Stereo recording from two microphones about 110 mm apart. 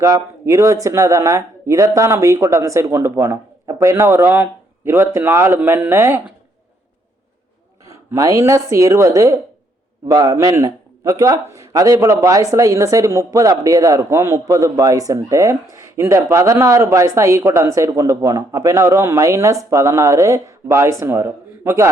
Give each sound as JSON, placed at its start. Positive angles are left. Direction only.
{"t": 0.0, "sound": "a man's voice", "side_deg": -30}
{"t": 8.1, "sound": "a man's voice", "side_deg": -30}